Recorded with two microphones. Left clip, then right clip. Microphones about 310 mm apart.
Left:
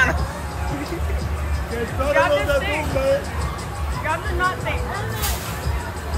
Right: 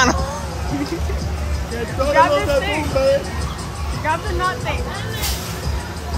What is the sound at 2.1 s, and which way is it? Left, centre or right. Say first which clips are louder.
Speech: right 3 dB; right.